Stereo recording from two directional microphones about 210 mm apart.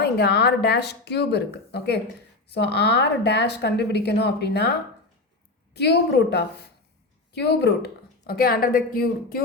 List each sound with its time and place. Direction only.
0.0 s a woman's voice: 50° left (ahead or behind)
5.7 s a woman's voice: 50° left (ahead or behind)